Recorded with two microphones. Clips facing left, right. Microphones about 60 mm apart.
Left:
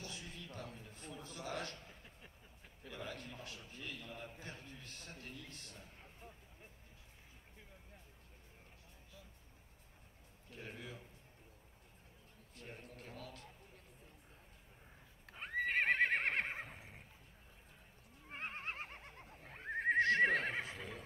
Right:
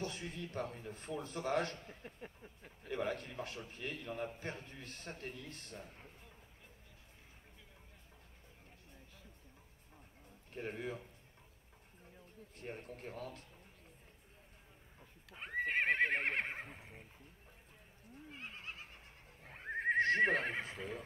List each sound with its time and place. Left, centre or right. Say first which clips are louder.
0.0 s a man's voice: right 7 dB; right
10.5 s a man's voice: right 8 dB; right
12.5 s a man's voice: right 5 dB; right
15.3 s horse: even; centre
15.7 s neigh: even; centre
18.3 s neigh: left 5 dB; left
19.4 s neigh: even; centre
20.0 s neigh: even; right